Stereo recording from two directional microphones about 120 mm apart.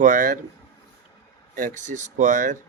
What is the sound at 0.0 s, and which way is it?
Speech, 90° right.